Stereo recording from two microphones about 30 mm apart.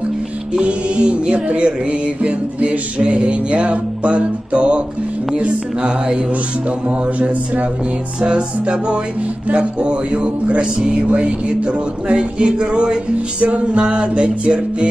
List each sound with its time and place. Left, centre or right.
0.6 s music: right
7.2 s speech: right
8.2 s music: right
13.4 s music: right